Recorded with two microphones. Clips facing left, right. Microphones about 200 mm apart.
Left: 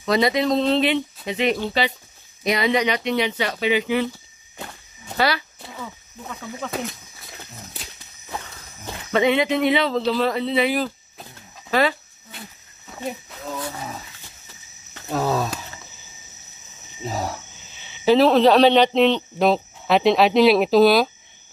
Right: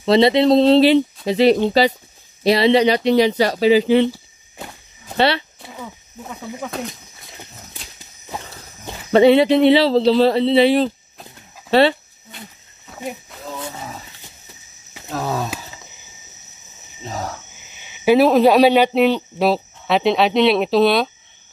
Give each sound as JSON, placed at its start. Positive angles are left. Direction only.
{"t": 0.0, "sound": "speech", "side_deg": -30}
{"t": 5.1, "sound": "speech", "side_deg": -30}
{"t": 5.8, "sound": "speech", "side_deg": -15}
{"t": 6.7, "sound": "speech", "side_deg": 5}
{"t": 9.1, "sound": "speech", "side_deg": -35}
{"t": 12.9, "sound": "wild animals", "side_deg": 0}
{"t": 15.0, "sound": "speech", "side_deg": 0}
{"t": 17.0, "sound": "cricket", "side_deg": 5}
{"t": 17.7, "sound": "speech", "side_deg": -10}